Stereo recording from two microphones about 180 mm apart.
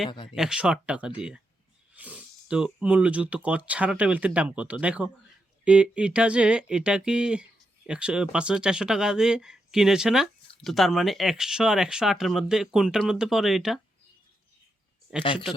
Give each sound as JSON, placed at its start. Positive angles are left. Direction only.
{"t": 0.3, "sound": "speech", "side_deg": -5}
{"t": 15.2, "sound": "speech", "side_deg": 30}